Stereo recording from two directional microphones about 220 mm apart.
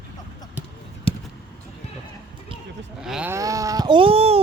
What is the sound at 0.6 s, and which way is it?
Basketball bounce, 5° right (ahead or behind).